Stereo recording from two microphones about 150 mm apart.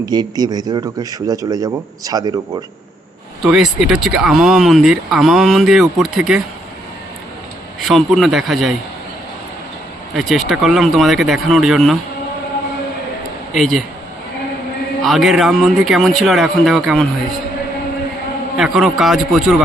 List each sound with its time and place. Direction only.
0.0 s a man's voice: 25° right (ahead or behind)
3.4 s speech: 5° right (ahead or behind)
7.9 s speech: centre (ahead or behind)
10.2 s speech: centre (ahead or behind)
13.5 s speech: centre (ahead or behind)
15.0 s speech: centre (ahead or behind)
18.5 s speech: centre (ahead or behind)